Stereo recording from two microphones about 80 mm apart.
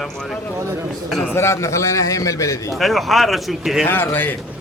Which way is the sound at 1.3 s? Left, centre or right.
Left.